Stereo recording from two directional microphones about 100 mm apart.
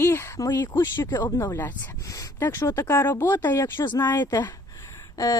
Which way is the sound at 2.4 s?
25° left (ahead or behind).